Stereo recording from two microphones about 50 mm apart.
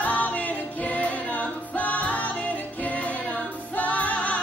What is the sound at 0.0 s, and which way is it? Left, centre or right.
Music, left.